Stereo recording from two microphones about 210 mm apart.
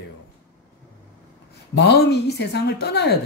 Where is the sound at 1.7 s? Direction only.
55° left (ahead or behind).